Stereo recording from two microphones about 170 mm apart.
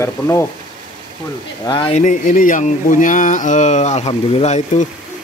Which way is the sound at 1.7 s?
25° left (ahead or behind).